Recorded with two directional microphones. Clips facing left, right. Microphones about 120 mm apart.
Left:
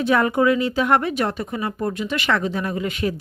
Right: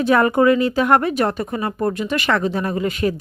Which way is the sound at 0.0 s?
45° right (ahead or behind).